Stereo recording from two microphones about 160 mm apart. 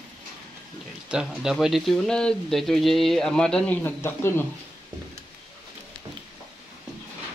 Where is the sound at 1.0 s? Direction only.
5° right (ahead or behind); by 4.5 s 15° left (ahead or behind).